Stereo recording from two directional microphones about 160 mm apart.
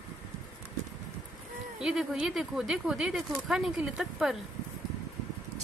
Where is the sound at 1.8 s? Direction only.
5° right (ahead or behind).